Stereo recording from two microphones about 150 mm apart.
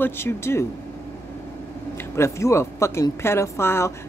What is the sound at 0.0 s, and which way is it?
Speech, 15° left (ahead or behind).